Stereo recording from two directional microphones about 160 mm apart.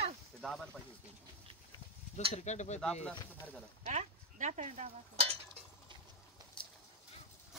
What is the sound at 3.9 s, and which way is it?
Speech, 50° right (ahead or behind).